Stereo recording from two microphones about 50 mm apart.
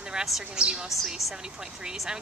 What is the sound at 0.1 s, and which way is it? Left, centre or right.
A woman's voice, centre.